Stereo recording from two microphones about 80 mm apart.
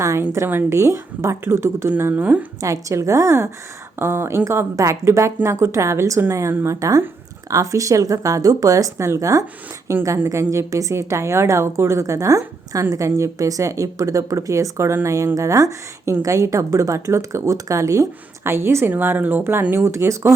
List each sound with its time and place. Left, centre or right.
0.0 s speech: right
2.6 s speech: right